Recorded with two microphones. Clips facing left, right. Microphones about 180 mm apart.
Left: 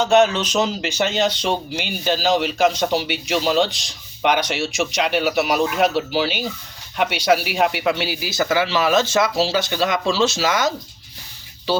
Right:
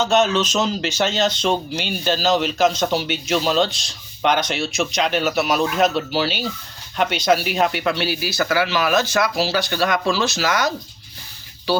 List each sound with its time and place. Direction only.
0.0 s speech: 15° left (ahead or behind)